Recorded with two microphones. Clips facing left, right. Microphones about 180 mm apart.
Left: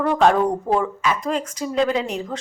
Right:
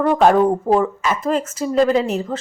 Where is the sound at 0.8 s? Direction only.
5° right (ahead or behind).